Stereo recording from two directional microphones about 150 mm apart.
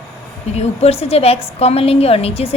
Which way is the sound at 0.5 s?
45° left (ahead or behind).